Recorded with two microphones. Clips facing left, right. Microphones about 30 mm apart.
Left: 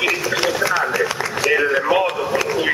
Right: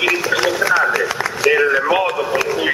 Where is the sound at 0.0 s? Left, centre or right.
Centre.